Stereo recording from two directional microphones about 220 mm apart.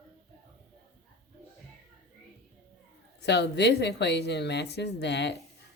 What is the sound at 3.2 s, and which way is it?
Speech, 50° left (ahead or behind).